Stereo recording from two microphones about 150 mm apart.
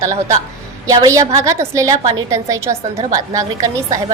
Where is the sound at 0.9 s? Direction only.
20° right (ahead or behind).